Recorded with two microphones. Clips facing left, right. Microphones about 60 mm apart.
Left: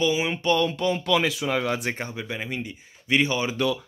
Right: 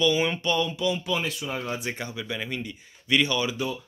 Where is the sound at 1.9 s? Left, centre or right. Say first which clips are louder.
Left 1 dB; left.